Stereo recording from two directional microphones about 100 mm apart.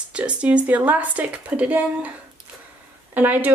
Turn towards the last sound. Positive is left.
turn(degrees=-20)  # may be behind; listen again after turning